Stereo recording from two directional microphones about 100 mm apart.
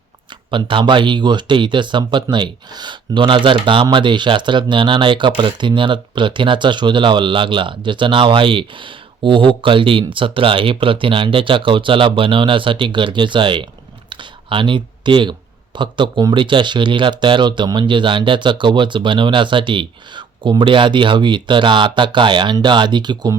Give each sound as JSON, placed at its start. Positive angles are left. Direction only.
{"t": 0.3, "sound": "speech", "side_deg": -55}